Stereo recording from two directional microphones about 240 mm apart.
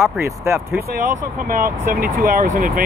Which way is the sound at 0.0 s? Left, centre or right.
Centre.